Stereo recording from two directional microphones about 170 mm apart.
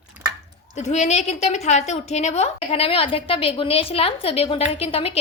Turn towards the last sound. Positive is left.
turn(degrees=35)  # may be behind; listen again after turning